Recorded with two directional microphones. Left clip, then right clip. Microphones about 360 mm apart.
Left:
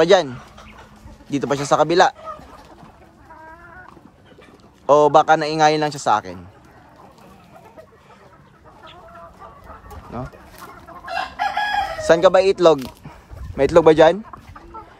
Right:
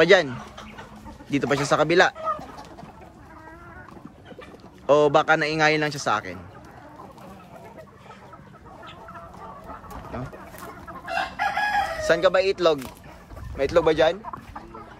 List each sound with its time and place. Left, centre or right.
0.0 s a man's voice: centre
1.3 s a man's voice: centre
4.8 s a man's voice: centre
10.1 s a man's voice: centre
11.1 s chicken: left
13.6 s a man's voice: centre